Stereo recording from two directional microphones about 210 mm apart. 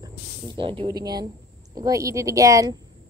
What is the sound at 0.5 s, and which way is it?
Speech, 25° right (ahead or behind).